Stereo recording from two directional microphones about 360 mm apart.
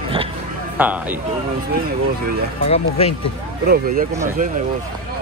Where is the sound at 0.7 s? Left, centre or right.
Centre.